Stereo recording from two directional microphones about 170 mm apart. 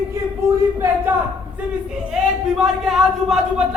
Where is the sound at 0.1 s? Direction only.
15° right (ahead or behind).